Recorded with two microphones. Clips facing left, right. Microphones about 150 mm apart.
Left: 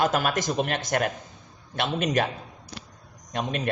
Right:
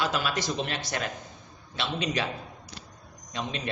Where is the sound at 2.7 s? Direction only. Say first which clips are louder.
Left 4 dB; 40° left (ahead or behind).